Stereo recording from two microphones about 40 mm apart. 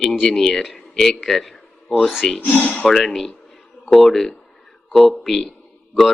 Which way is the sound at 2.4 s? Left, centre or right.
Left.